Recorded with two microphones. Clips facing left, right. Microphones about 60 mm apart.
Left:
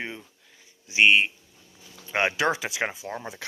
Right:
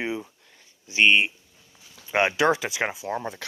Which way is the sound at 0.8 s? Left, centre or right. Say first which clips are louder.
Even; centre.